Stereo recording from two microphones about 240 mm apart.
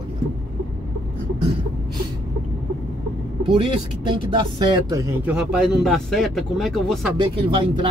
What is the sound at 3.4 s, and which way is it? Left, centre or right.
Speech, right.